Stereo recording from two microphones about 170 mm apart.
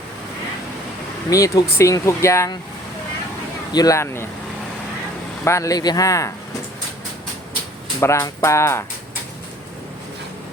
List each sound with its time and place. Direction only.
1.3 s speech: 20° left (ahead or behind)
3.7 s speech: 20° left (ahead or behind)
5.5 s speech: 20° left (ahead or behind)
8.0 s speech: 15° left (ahead or behind)